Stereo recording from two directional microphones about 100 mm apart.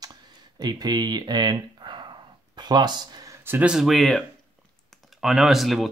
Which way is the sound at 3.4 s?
20° right (ahead or behind).